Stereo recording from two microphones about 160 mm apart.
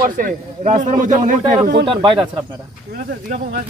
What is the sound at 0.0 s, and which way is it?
A man's voice, 55° right (ahead or behind).